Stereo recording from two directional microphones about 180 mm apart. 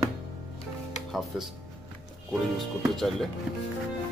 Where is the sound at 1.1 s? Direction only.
Centre (ahead or behind).